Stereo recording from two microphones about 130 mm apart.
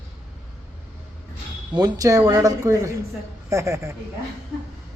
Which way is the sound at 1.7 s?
30° right (ahead or behind).